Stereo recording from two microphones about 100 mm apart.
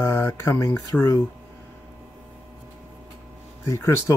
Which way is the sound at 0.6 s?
35° left (ahead or behind).